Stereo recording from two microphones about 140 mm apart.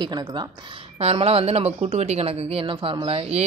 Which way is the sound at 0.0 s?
30° right (ahead or behind).